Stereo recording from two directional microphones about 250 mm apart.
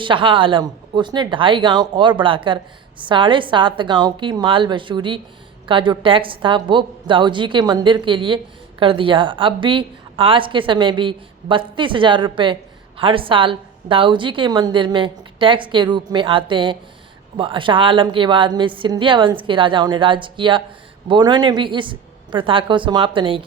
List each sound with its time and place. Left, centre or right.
0.0 s a woman's voice: centre